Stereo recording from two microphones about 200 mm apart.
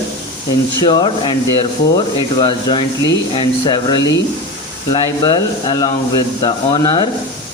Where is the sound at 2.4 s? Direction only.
25° left (ahead or behind).